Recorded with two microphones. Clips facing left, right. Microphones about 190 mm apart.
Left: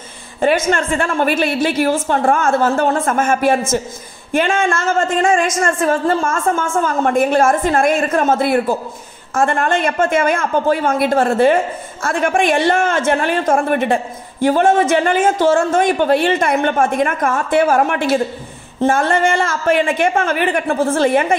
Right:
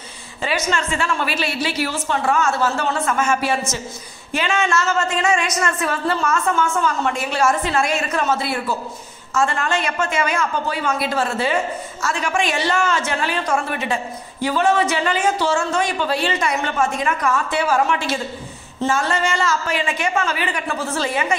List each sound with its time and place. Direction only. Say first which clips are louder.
0.4 s speech: left 7 dB; 55° left (ahead or behind)